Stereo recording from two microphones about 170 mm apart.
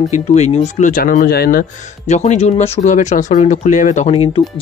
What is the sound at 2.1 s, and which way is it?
Speech, 45° left (ahead or behind).